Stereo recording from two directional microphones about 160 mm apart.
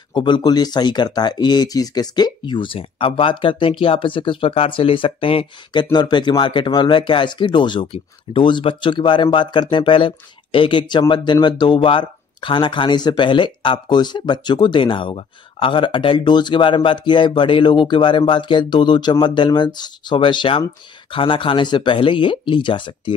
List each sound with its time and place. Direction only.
0.1 s speech: 30° left (ahead or behind)